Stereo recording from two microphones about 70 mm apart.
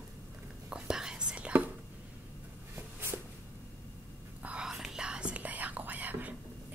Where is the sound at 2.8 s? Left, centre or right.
Right.